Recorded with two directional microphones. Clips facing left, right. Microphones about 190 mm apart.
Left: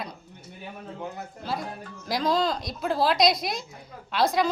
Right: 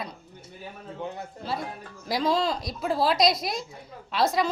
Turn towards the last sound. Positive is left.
turn(degrees=0)  # may be behind; listen again after turning